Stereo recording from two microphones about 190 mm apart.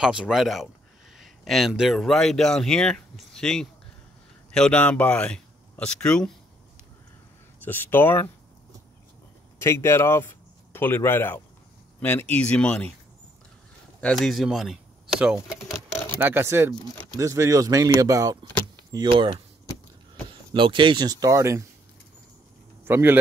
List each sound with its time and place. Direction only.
0.0 s speech: 5° right (ahead or behind)
7.6 s speech: 10° left (ahead or behind)
9.6 s speech: 15° left (ahead or behind)
14.0 s speech: centre (ahead or behind)
15.7 s sewing machine: 10° left (ahead or behind)
16.2 s speech: 10° right (ahead or behind); by 19.4 s 25° right (ahead or behind)
20.5 s speech: 25° right (ahead or behind)
22.8 s speech: 10° right (ahead or behind)